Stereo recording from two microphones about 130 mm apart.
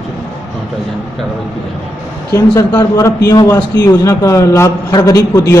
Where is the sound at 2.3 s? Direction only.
20° left (ahead or behind).